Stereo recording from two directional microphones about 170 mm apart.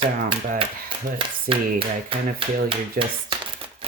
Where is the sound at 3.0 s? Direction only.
55° right (ahead or behind).